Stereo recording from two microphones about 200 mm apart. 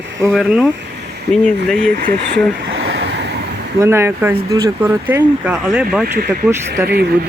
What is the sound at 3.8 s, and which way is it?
Speech, 10° right (ahead or behind).